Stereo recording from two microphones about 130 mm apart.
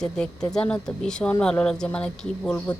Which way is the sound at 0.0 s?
5° left (ahead or behind).